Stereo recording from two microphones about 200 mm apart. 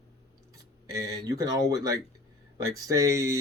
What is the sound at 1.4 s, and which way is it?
Speech, 15° right (ahead or behind).